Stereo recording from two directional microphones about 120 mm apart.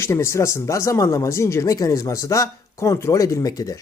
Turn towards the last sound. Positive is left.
turn(degrees=30)  # may be behind; listen again after turning